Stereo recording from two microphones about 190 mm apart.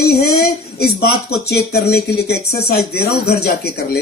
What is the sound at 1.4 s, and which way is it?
Speech, 55° left (ahead or behind).